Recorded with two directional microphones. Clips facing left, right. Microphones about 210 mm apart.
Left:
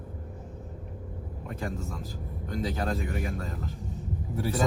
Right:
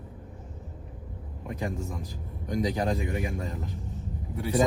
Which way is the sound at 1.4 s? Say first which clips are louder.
Right 2 dB; 15° right (ahead or behind).